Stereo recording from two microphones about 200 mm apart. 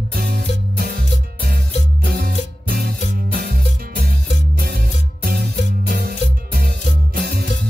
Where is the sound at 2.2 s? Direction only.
50° right (ahead or behind).